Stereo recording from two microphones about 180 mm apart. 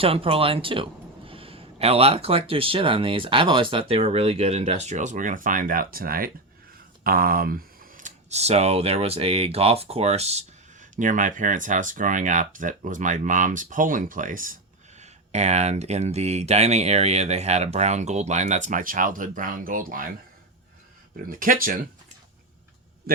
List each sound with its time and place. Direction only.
0.0 s speech: 30° right (ahead or behind); by 14.6 s 50° right (ahead or behind)
15.0 s speech: 40° right (ahead or behind)
21.2 s speech: 50° right (ahead or behind)
23.1 s speech: 55° right (ahead or behind)